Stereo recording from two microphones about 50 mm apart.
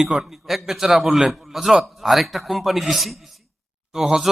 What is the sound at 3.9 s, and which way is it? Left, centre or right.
Speech, centre.